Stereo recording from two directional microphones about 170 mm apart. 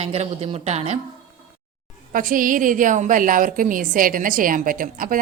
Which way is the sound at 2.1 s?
55° right (ahead or behind).